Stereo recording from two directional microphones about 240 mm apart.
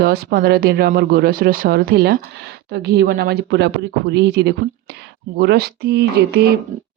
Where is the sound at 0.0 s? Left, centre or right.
Right.